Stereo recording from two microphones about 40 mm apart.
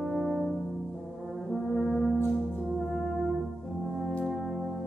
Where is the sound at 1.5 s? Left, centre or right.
Centre.